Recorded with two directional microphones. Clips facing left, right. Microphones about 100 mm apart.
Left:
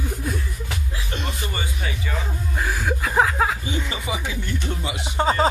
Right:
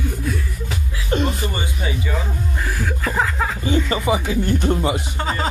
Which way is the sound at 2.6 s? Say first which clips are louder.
Left 1 dB; 10° left (ahead or behind).